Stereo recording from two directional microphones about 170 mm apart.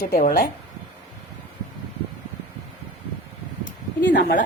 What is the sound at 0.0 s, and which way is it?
Speech, 55° left (ahead or behind).